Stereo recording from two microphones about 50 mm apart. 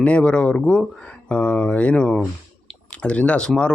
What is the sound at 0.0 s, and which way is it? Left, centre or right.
Speech, left.